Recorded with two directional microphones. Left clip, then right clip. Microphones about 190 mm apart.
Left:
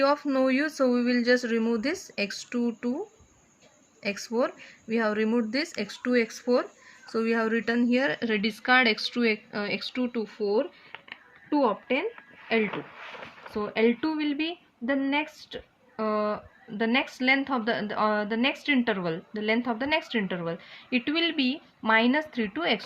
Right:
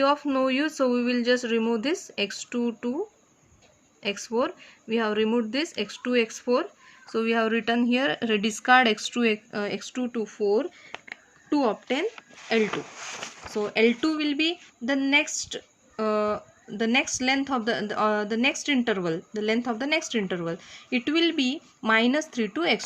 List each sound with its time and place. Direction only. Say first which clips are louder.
0.0 s speech: right 1 dB; 20° right (ahead or behind)
4.0 s speech: right 1 dB; 20° right (ahead or behind)